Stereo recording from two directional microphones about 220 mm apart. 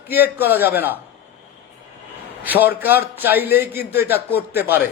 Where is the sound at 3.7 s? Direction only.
45° left (ahead or behind).